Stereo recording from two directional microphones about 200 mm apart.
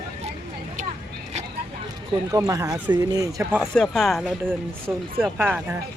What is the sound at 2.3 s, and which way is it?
Speech, 15° right (ahead or behind).